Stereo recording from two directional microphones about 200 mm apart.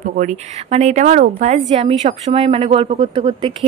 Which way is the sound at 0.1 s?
40° right (ahead or behind).